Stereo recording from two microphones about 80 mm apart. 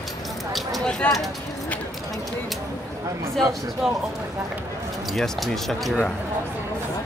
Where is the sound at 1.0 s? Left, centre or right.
Centre.